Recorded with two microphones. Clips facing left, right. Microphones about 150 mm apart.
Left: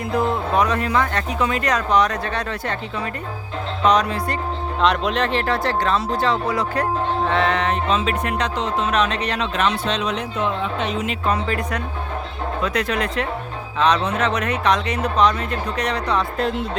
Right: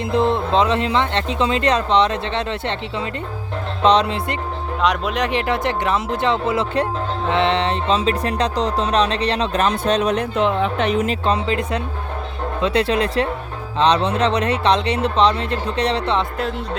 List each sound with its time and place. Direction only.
0.0 s speech: 25° right (ahead or behind)
4.8 s speech: 10° right (ahead or behind); by 6.8 s 25° right (ahead or behind)
7.3 s music: 25° right (ahead or behind); by 10.2 s 45° right (ahead or behind)
10.3 s speech: 70° right (ahead or behind)
11.0 s music: 35° right (ahead or behind)
11.4 s speech: 20° right (ahead or behind)